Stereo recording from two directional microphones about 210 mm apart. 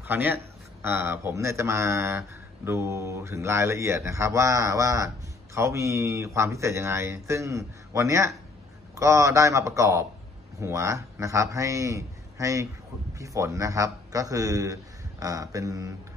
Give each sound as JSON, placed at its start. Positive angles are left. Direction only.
{"t": 0.0, "sound": "speech", "side_deg": -10}